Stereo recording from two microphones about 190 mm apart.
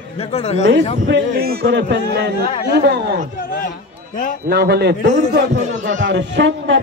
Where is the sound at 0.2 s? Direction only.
35° left (ahead or behind).